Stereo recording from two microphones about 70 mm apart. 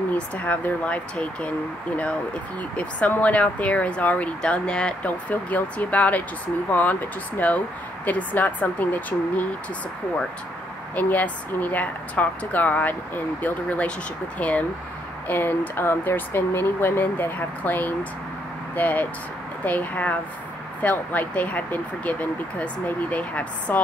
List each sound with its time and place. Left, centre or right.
0.4 s speech: left
2.8 s speech: left
5.3 s speech: left
11.0 s speech: left